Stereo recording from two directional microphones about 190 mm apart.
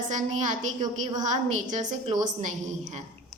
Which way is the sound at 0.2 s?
40° right (ahead or behind).